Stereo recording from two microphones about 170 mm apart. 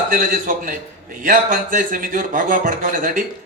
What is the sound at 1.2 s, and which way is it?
A man's voice, 50° right (ahead or behind).